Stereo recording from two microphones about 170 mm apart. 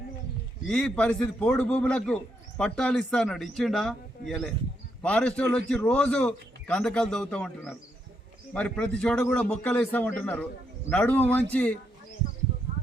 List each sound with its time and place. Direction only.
0.7 s a man's voice: 5° left (ahead or behind)